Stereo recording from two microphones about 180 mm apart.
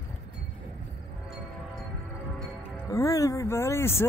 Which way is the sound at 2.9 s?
15° left (ahead or behind).